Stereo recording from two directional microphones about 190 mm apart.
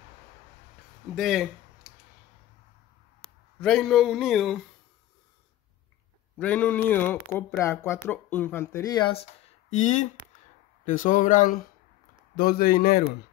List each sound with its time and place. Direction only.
1.1 s speech: centre (ahead or behind)
3.2 s speech: centre (ahead or behind)
6.4 s speech: 10° left (ahead or behind); by 9.2 s 25° left (ahead or behind)
9.7 s speech: 40° left (ahead or behind)